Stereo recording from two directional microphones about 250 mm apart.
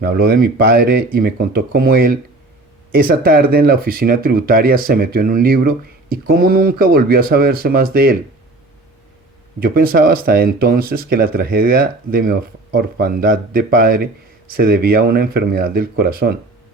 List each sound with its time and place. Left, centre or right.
0.0 s speech: right
9.6 s speech: right